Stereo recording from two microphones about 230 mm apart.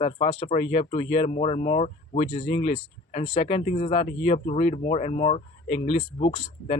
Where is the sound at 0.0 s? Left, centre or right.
Left.